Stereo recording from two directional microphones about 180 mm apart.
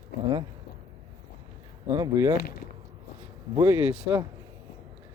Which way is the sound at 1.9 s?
20° right (ahead or behind).